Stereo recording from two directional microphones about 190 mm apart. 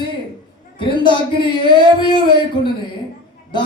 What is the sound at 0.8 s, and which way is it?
Speech, 25° left (ahead or behind).